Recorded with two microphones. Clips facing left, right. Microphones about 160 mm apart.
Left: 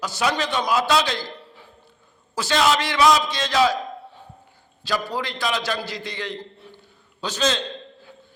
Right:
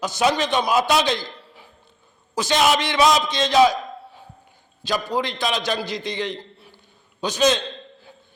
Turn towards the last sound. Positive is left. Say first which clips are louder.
# right 4 dB
turn(degrees=-15)  # may be behind; listen again after turning